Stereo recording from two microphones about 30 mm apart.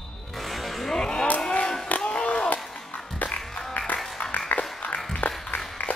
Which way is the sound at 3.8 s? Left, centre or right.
Left.